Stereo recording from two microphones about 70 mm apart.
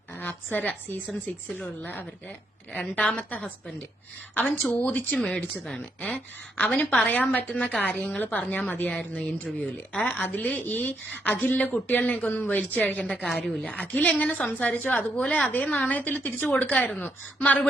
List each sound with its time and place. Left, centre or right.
0.2 s a woman's voice: left
5.1 s speech: centre